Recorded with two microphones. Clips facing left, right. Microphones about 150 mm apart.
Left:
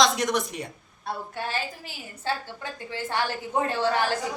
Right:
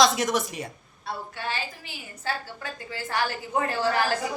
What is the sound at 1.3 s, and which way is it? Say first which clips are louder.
Speech: left 2 dB; 45° left (ahead or behind).